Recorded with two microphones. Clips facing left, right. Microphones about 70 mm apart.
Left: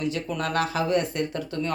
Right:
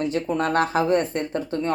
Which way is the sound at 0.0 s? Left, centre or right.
Right.